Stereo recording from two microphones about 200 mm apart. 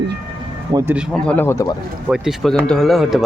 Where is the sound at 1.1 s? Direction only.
5° left (ahead or behind).